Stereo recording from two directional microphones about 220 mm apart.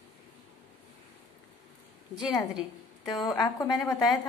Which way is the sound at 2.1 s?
Centre (ahead or behind).